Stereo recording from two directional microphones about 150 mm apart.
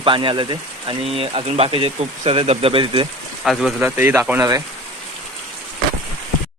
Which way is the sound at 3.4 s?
5° right (ahead or behind).